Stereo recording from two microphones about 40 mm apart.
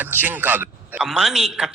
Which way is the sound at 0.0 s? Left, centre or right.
Right.